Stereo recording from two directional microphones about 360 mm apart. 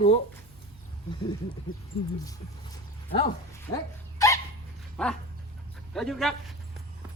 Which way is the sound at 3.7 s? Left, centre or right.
Centre.